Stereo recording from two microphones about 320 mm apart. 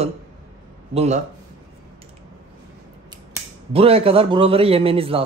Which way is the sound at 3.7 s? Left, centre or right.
Centre.